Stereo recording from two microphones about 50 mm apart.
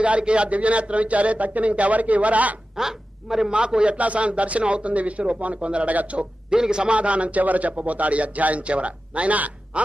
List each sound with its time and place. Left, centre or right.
0.0 s a man's voice: right
2.7 s a woman's voice: centre
3.5 s a man's voice: right